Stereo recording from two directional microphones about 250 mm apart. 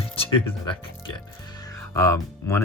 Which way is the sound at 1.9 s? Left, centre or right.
Centre.